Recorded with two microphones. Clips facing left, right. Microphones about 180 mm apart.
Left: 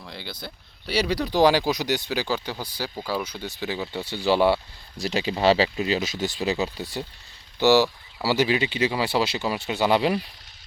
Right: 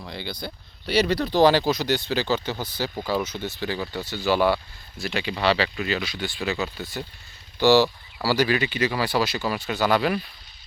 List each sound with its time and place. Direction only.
0.0 s speech: centre (ahead or behind)
3.9 s speech: 30° left (ahead or behind)
4.9 s speech: 35° left (ahead or behind)
5.6 s speech: 20° left (ahead or behind)
5.9 s speech: 40° left (ahead or behind)
7.6 s speech: 20° left (ahead or behind)